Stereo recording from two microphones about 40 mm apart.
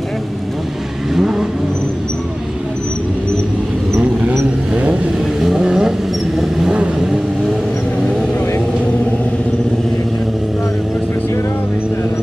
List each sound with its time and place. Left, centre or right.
1.1 s vehicle: centre
5.6 s vehicle: centre